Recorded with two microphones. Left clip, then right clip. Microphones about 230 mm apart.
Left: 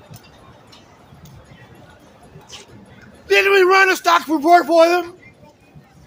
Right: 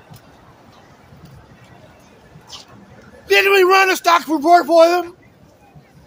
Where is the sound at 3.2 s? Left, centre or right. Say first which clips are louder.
Right 1 dB; right; by 5.1 s centre.